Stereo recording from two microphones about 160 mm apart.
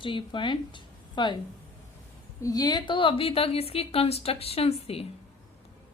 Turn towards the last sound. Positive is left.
turn(degrees=40)  # may be behind; listen again after turning